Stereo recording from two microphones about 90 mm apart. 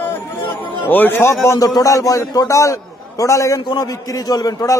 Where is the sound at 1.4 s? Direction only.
40° left (ahead or behind).